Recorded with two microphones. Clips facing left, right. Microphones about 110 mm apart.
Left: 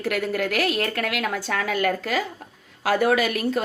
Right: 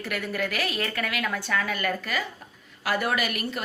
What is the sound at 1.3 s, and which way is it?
Speech, 90° left.